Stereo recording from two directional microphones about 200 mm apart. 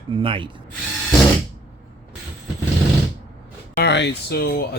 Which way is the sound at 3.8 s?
60° left (ahead or behind).